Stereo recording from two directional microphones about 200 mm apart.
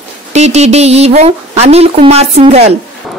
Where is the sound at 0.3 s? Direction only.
35° right (ahead or behind).